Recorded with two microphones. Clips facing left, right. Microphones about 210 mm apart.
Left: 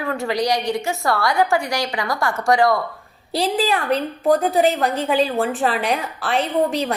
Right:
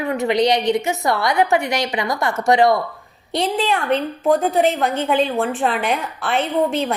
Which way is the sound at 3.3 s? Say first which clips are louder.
Even; centre (ahead or behind).